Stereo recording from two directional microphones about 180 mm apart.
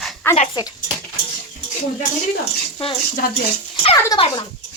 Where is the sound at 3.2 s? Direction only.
55° left (ahead or behind).